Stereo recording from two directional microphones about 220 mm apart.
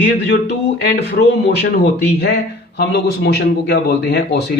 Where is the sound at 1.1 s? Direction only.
50° left (ahead or behind).